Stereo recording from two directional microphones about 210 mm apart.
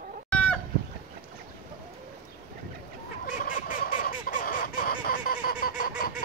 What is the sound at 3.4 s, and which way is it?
Fowl, 40° left (ahead or behind).